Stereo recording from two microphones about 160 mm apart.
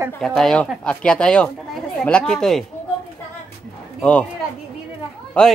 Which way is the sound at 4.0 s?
5° left (ahead or behind).